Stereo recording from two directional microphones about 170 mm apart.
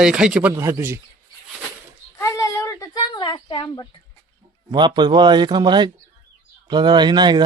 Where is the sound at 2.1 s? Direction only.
20° left (ahead or behind).